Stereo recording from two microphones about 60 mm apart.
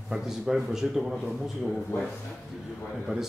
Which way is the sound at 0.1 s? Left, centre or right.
Centre.